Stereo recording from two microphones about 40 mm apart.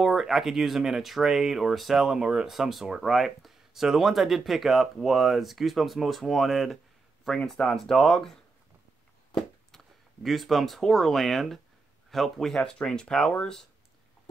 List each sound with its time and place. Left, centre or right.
0.0 s speech: centre
9.7 s speech: centre
12.8 s speech: centre